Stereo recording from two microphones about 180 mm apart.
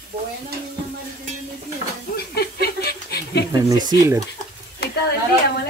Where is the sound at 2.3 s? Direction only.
60° left (ahead or behind).